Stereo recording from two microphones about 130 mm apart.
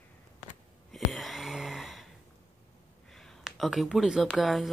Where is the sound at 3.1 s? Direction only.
Centre (ahead or behind).